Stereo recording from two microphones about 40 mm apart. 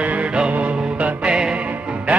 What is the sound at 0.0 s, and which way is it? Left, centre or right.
Music, right.